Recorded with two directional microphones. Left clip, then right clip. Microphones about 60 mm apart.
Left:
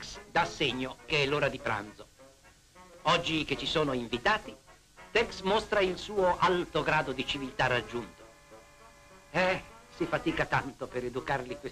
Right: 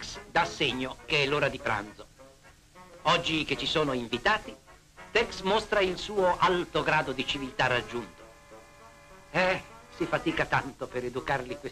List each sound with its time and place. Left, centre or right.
0.0 s speech: right
9.3 s speech: right